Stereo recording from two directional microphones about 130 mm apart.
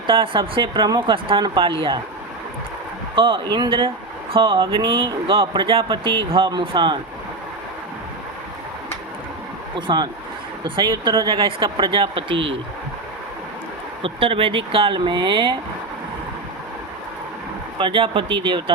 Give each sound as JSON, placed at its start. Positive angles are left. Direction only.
{"t": 0.1, "sound": "speech", "side_deg": -40}
{"t": 3.2, "sound": "speech", "side_deg": -40}
{"t": 9.7, "sound": "speech", "side_deg": -35}
{"t": 14.0, "sound": "speech", "side_deg": -45}
{"t": 17.7, "sound": "speech", "side_deg": -40}